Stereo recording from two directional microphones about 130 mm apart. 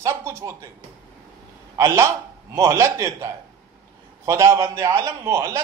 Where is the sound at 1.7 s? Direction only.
20° right (ahead or behind).